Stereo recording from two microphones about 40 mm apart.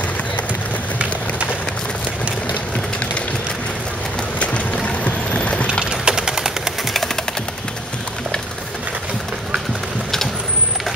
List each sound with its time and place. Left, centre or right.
4.8 s a sound: left
5.9 s engine: centre
6.8 s music: centre